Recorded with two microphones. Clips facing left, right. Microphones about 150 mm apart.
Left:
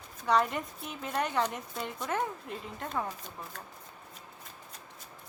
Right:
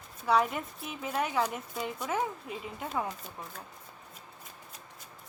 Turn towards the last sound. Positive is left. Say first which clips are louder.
# even
turn(degrees=-5)  # may be behind; listen again after turning